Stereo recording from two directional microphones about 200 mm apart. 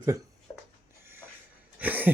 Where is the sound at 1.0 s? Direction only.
10° right (ahead or behind).